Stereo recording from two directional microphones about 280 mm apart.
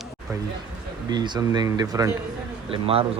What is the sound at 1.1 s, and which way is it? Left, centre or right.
Speech, centre.